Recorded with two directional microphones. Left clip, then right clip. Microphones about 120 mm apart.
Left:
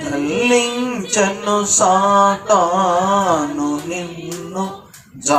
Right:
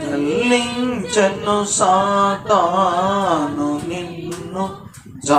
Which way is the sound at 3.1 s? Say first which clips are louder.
Left 2 dB; 35° left (ahead or behind).